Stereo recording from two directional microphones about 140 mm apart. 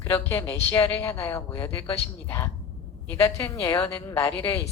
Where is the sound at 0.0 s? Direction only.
20° left (ahead or behind).